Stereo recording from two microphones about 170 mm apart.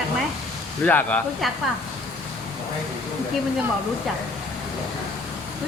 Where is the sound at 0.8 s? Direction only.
10° left (ahead or behind).